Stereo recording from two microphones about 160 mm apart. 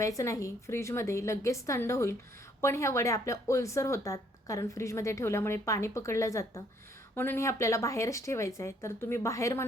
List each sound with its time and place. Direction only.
0.2 s speech: 20° left (ahead or behind)